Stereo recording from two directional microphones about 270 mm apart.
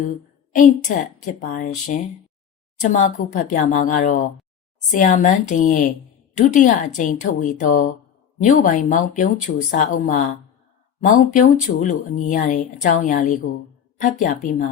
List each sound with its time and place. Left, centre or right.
0.5 s a woman's voice: left